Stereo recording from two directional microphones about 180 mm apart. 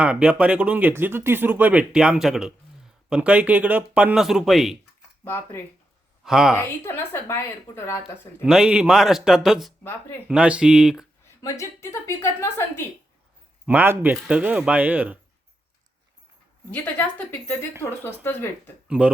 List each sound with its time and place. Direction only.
0.0 s speech: 5° right (ahead or behind)
5.2 s speech: 15° left (ahead or behind)
6.2 s speech: 5° right (ahead or behind)
6.6 s speech: 15° left (ahead or behind)
8.4 s speech: 5° right (ahead or behind)
11.4 s speech: 15° left (ahead or behind)
13.7 s speech: 10° right (ahead or behind)
16.7 s speech: 10° left (ahead or behind)
18.9 s speech: 5° right (ahead or behind)